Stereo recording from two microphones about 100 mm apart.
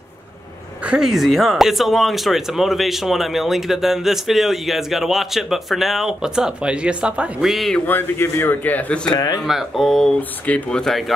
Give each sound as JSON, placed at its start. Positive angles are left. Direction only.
{"t": 0.8, "sound": "speech", "side_deg": -5}
{"t": 7.5, "sound": "speech", "side_deg": 0}
{"t": 7.8, "sound": "a man's voice", "side_deg": 20}
{"t": 9.0, "sound": "speech", "side_deg": 45}
{"t": 9.4, "sound": "a man's voice", "side_deg": 0}